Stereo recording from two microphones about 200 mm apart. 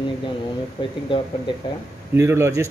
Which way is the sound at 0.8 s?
25° left (ahead or behind).